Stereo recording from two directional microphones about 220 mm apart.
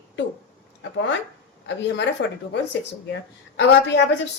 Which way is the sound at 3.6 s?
50° left (ahead or behind).